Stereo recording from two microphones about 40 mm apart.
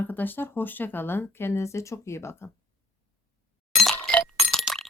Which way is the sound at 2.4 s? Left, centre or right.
Left.